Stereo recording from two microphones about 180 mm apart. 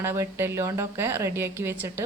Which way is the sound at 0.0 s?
15° right (ahead or behind).